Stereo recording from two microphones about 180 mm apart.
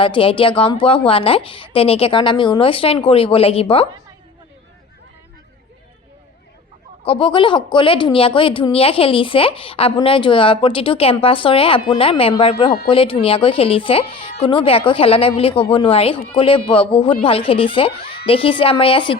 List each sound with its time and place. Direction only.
0.0 s speech: 30° left (ahead or behind)
7.0 s speech: 30° left (ahead or behind)